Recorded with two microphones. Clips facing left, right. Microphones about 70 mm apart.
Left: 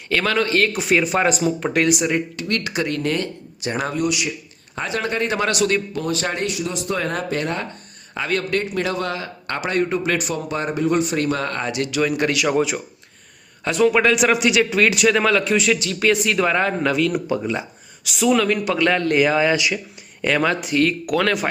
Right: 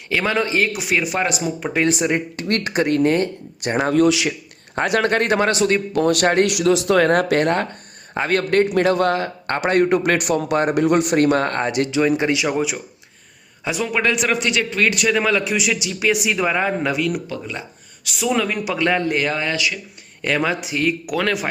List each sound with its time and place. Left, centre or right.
0.1 s a man's voice: centre
1.9 s speech: right
2.3 s speech: right
3.6 s a man's voice: right
5.4 s speech: right
5.9 s a man's voice: right
11.9 s speech: right
13.7 s a man's voice: centre
17.2 s speech: centre
18.3 s a man's voice: centre
19.1 s a man's voice: centre
19.5 s speech: left
20.2 s a man's voice: centre